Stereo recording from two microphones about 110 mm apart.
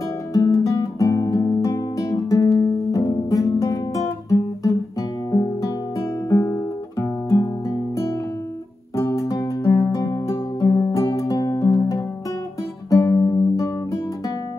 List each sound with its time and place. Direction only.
0.3 s music: 30° left (ahead or behind)
5.3 s music: 30° left (ahead or behind)
12.9 s music: 35° left (ahead or behind)